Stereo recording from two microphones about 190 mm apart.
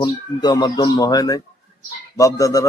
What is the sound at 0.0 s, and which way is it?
Speech, 20° left (ahead or behind).